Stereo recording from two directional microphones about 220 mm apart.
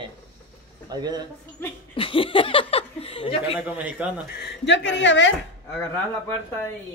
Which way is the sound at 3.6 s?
5° right (ahead or behind).